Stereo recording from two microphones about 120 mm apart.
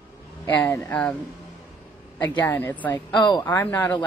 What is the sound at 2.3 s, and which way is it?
Speech, 15° left (ahead or behind).